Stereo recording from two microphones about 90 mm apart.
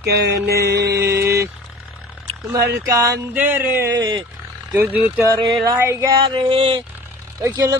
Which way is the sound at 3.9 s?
55° right (ahead or behind).